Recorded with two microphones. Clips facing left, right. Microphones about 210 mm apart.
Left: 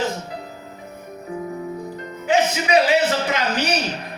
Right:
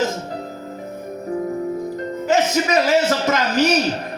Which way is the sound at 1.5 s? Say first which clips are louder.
Right 5 dB; 45° right (ahead or behind).